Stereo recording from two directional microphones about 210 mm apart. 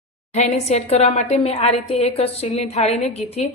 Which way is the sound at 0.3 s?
30° left (ahead or behind).